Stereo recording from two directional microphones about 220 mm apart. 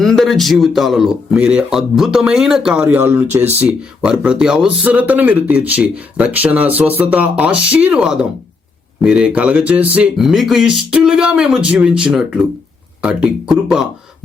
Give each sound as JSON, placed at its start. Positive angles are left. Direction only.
{"t": 0.0, "sound": "speech", "side_deg": 0}